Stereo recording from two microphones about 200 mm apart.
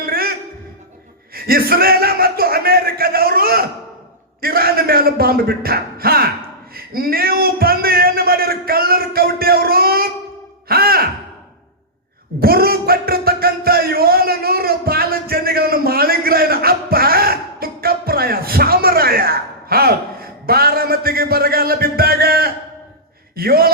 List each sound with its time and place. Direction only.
0.0 s music: 50° right (ahead or behind)
1.3 s speech: 50° right (ahead or behind)
4.4 s a sound: 50° right (ahead or behind)
10.7 s sigh: 50° right (ahead or behind)
12.4 s a sound: 50° right (ahead or behind)
23.3 s a man's voice: 50° right (ahead or behind)